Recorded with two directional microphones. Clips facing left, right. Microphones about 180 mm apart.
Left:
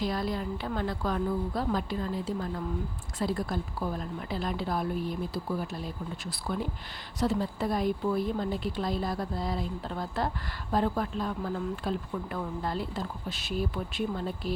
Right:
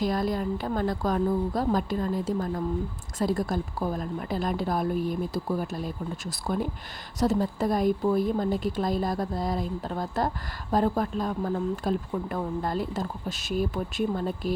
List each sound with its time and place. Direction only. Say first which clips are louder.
0.0 s a woman's voice: right 4 dB; 45° right (ahead or behind)